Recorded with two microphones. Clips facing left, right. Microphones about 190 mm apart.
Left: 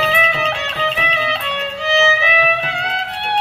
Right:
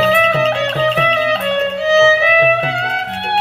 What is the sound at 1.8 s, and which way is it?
Music, 40° right (ahead or behind).